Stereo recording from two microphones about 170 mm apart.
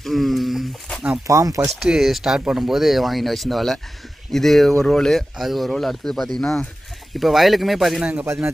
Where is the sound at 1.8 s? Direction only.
Centre (ahead or behind).